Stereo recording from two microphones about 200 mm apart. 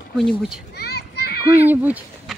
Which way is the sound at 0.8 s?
55° left (ahead or behind).